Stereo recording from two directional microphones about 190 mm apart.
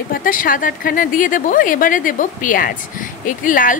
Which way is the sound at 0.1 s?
45° left (ahead or behind).